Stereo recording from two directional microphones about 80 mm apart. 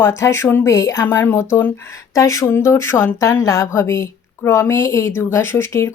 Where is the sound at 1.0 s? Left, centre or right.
Left.